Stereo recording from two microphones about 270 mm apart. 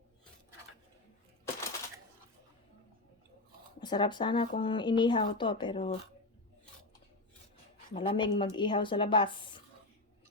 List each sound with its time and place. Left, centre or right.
3.8 s a woman's voice: centre
7.9 s a woman's voice: centre